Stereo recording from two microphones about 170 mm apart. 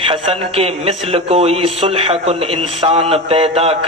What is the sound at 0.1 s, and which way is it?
A man's voice, 35° right (ahead or behind).